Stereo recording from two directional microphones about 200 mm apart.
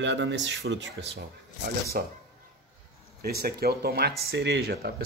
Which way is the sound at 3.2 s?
50° right (ahead or behind).